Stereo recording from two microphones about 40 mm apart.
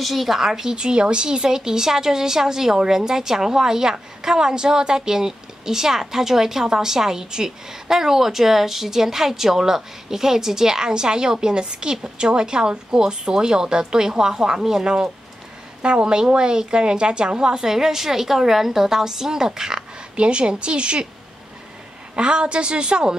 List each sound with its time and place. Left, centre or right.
0.0 s a woman's voice: centre
0.7 s a woman's voice: right
22.1 s a woman's voice: right